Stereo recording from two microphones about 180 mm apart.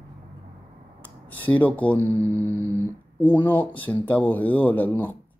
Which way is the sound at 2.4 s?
15° left (ahead or behind).